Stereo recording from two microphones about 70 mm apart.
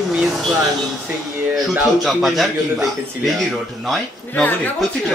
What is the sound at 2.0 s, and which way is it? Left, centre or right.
A man's voice, centre.